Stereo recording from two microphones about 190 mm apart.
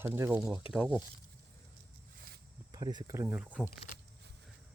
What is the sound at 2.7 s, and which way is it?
Speech, 20° right (ahead or behind).